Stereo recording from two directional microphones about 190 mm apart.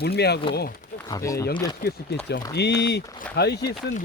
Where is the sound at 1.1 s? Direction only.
15° left (ahead or behind).